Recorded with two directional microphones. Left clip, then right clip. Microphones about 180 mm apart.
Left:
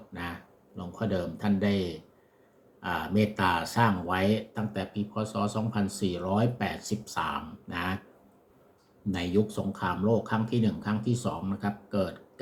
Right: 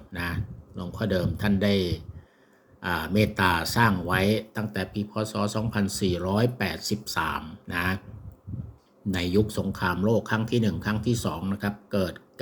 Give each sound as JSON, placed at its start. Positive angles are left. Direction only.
{"t": 0.1, "sound": "a sound", "side_deg": -45}
{"t": 0.8, "sound": "speech", "side_deg": -45}
{"t": 9.1, "sound": "speech", "side_deg": -45}